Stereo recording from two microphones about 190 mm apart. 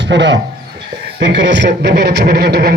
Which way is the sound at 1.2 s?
65° right (ahead or behind).